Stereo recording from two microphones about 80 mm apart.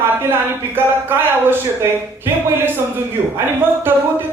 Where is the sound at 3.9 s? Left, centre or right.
Right.